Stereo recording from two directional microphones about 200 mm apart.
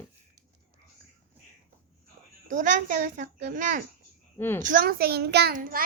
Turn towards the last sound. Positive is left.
turn(degrees=-45)  # may be behind; listen again after turning